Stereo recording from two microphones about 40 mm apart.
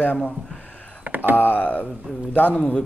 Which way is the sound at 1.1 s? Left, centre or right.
Right.